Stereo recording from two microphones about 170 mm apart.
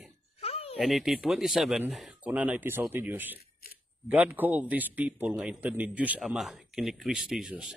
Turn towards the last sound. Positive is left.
turn(degrees=-5)  # may be behind; listen again after turning